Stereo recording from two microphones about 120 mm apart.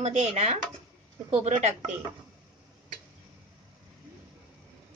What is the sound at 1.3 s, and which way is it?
Speech, 70° right (ahead or behind).